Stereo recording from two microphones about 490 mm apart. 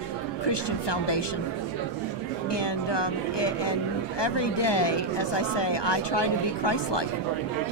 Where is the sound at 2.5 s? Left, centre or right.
Left.